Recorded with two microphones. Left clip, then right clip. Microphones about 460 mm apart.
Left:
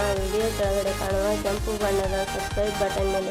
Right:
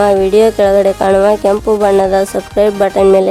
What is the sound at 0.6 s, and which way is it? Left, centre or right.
Speech, right.